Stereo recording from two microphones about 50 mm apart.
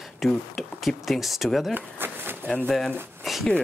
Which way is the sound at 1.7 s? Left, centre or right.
Right.